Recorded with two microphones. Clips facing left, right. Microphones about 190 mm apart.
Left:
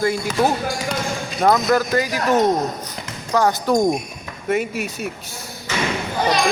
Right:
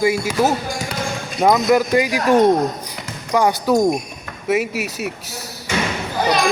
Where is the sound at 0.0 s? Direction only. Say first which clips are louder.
Right 2 dB; 10° right (ahead or behind).